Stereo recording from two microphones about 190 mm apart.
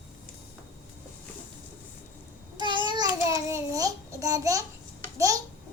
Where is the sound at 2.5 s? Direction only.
25° right (ahead or behind).